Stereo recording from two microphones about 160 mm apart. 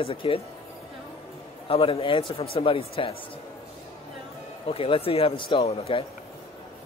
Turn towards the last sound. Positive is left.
turn(degrees=40)  # may be behind; listen again after turning